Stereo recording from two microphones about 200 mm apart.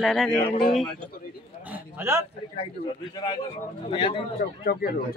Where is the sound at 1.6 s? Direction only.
10° right (ahead or behind).